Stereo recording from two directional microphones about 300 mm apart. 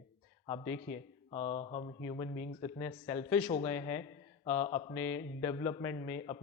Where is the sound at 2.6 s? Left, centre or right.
Centre.